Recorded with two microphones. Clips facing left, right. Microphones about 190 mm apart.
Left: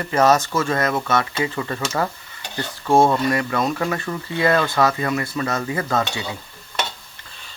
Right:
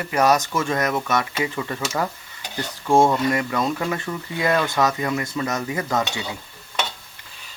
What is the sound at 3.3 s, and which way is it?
Cutlery, 20° right (ahead or behind).